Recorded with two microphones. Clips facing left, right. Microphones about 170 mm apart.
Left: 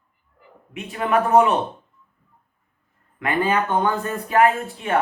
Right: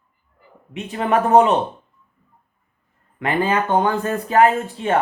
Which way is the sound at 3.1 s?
25° right (ahead or behind).